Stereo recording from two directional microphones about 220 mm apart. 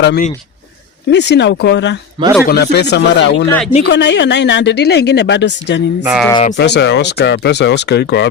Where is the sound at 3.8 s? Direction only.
50° left (ahead or behind).